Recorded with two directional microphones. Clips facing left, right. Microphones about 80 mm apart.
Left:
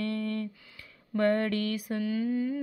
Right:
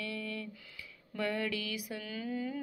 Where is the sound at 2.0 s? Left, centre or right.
Left.